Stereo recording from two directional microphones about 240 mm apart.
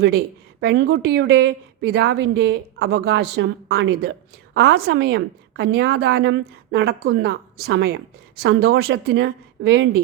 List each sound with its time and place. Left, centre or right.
0.0 s a woman's voice: right